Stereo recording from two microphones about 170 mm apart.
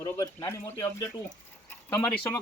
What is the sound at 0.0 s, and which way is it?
Speech, 20° left (ahead or behind).